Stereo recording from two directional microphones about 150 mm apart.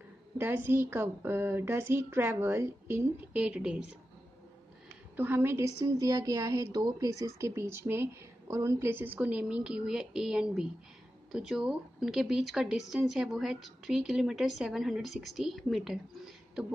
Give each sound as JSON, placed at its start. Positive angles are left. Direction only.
{"t": 0.4, "sound": "a woman's voice", "side_deg": -15}
{"t": 5.1, "sound": "a woman's voice", "side_deg": -15}